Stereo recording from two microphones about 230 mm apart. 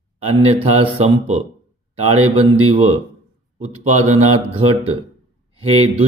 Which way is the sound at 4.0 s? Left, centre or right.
Right.